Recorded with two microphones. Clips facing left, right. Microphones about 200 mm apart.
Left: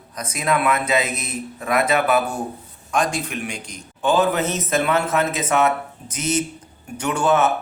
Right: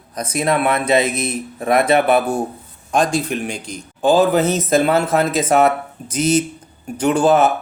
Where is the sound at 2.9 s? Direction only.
30° right (ahead or behind).